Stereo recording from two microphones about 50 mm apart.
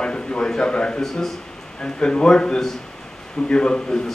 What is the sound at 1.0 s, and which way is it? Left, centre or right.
Speech, centre.